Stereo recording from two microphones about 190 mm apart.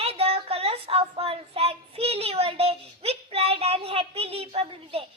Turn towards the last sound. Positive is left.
turn(degrees=-30)  # may be behind; listen again after turning